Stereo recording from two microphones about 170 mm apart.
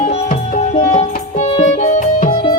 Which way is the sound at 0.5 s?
40° left (ahead or behind).